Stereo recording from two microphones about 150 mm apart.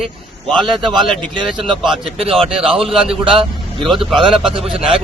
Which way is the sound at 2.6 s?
40° right (ahead or behind).